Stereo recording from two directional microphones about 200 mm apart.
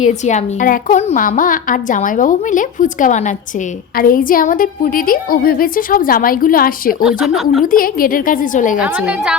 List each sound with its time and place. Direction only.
0.0 s a woman's voice: 35° left (ahead or behind)
7.0 s speech: centre (ahead or behind)
7.6 s a woman's voice: 45° left (ahead or behind)
8.8 s speech: 5° right (ahead or behind)